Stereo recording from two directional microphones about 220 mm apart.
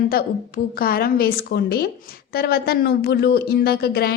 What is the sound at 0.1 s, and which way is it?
Speech, 40° left (ahead or behind).